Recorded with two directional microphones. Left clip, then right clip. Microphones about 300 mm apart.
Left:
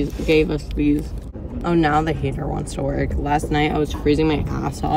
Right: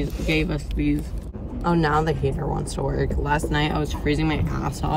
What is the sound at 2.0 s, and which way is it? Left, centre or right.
Speech, centre.